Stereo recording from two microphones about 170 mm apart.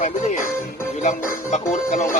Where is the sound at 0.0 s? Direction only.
50° left (ahead or behind).